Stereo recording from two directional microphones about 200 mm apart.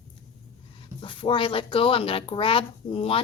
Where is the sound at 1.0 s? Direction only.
25° left (ahead or behind).